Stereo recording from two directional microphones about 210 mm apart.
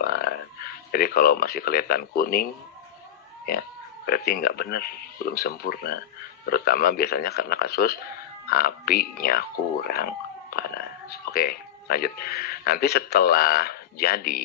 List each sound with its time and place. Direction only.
0.0 s speech: 45° left (ahead or behind)
3.4 s speech: 45° left (ahead or behind)